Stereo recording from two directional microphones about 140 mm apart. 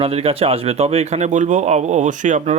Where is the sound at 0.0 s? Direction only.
45° right (ahead or behind).